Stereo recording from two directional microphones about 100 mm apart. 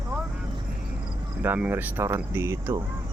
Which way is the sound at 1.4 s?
20° right (ahead or behind).